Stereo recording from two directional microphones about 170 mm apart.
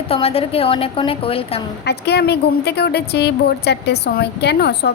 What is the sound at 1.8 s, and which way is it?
A woman's voice, 75° left (ahead or behind).